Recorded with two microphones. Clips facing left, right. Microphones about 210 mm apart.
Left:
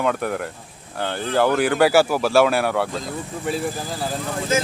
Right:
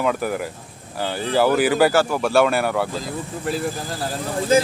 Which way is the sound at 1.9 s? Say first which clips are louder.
Left 1 dB; 10° left (ahead or behind).